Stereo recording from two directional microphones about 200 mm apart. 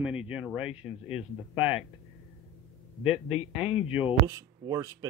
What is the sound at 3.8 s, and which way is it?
Speech, 5° right (ahead or behind).